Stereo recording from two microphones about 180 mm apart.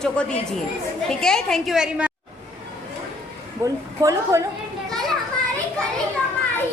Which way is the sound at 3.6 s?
15° right (ahead or behind).